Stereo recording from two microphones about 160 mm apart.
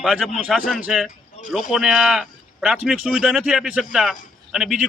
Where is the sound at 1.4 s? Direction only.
45° left (ahead or behind).